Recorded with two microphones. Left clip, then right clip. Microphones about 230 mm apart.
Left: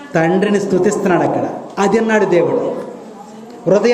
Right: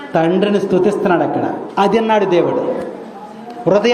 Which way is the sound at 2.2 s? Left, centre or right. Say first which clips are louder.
Left 1 dB; right.